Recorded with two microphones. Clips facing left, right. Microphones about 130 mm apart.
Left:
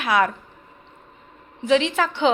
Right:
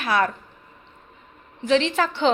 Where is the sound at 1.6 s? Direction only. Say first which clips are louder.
Left 1 dB; 10° left (ahead or behind).